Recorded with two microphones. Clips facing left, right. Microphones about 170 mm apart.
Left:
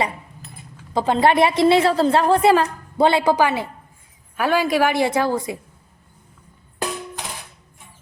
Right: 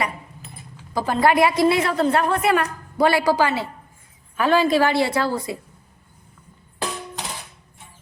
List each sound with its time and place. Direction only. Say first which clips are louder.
0.9 s a woman's voice: left 2 dB; 25° left (ahead or behind)